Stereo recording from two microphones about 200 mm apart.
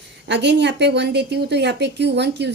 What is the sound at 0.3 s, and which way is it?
A woman's voice, 60° right (ahead or behind).